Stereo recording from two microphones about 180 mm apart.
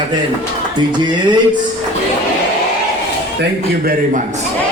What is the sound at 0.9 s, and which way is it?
Speech, 25° right (ahead or behind).